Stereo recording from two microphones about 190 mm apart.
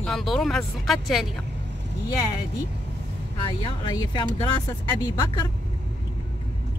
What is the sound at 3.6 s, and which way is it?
Speech, 25° left (ahead or behind).